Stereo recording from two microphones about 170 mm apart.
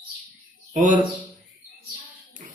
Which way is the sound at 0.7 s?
45° right (ahead or behind).